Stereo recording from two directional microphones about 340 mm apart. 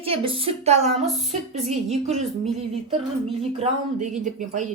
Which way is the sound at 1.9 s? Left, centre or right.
Centre.